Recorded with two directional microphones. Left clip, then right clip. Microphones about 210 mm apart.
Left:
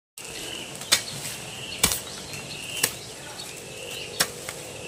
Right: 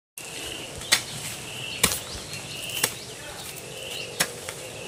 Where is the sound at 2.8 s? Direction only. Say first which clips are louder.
Even; centre (ahead or behind).